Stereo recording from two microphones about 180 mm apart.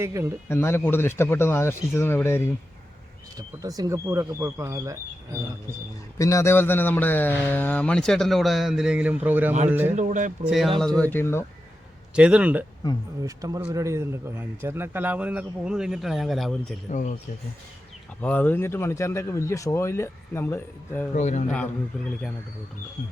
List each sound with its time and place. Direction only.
0.0 s speech: 15° right (ahead or behind)
0.4 s speech: 15° left (ahead or behind)
3.3 s speech: 20° right (ahead or behind)
6.1 s a man's voice: 15° left (ahead or behind); by 9.9 s 10° right (ahead or behind)
9.9 s speech: 45° right (ahead or behind)
10.4 s a man's voice: centre (ahead or behind)
12.1 s speech: 5° right (ahead or behind)
13.2 s a man's voice: 20° right (ahead or behind); by 16.7 s centre (ahead or behind)
16.9 s speech: 45° left (ahead or behind)
18.2 s speech: 10° left (ahead or behind)
21.2 s a man's voice: 40° left (ahead or behind)
21.9 s a man's voice: 5° left (ahead or behind)